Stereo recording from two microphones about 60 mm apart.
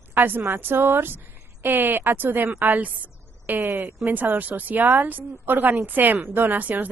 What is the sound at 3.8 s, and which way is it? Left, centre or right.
Speech, right.